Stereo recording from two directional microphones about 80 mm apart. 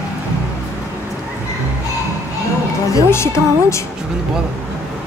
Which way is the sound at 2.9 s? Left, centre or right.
Left.